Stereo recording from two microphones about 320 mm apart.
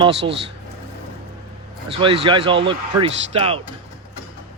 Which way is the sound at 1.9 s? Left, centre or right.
Centre.